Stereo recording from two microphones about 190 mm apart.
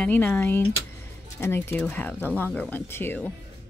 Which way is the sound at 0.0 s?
10° left (ahead or behind).